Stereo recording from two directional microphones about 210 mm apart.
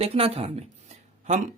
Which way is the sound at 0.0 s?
25° right (ahead or behind).